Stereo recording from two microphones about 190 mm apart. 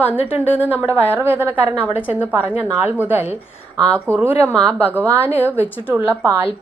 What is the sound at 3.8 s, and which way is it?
Speech, 5° left (ahead or behind).